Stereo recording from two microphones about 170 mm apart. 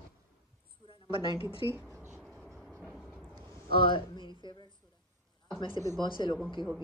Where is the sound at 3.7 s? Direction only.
30° left (ahead or behind).